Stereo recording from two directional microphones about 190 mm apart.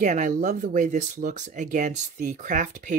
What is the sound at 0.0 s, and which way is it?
Speech, 40° right (ahead or behind).